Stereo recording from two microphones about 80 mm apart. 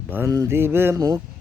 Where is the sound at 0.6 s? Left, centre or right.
Right.